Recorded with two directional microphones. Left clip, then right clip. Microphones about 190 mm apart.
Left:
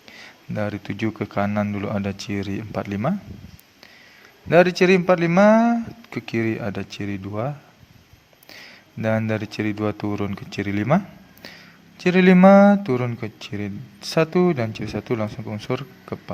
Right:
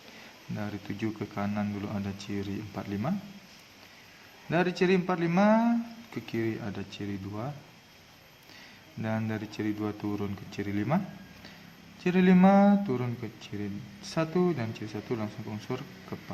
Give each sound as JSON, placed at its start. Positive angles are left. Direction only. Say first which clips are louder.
{"t": 0.5, "sound": "speech", "louder": "left 11 dB", "side_deg": 45}
{"t": 4.4, "sound": "speech", "louder": "left 12 dB", "side_deg": 45}
{"t": 8.5, "sound": "speech", "louder": "left 8 dB", "side_deg": 45}